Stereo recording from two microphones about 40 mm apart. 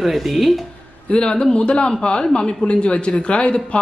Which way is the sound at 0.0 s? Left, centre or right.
Centre.